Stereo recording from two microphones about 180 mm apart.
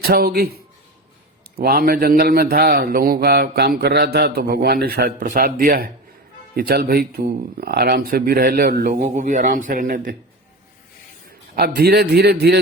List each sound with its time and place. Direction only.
0.0 s speech: 60° right (ahead or behind)
11.5 s speech: 60° right (ahead or behind)